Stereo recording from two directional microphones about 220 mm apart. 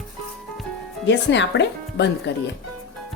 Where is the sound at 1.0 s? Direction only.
55° left (ahead or behind).